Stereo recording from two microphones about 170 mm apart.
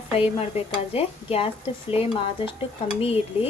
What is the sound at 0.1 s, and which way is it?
Speech, 35° left (ahead or behind).